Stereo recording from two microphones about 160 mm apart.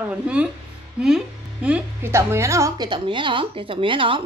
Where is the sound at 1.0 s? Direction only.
5° right (ahead or behind).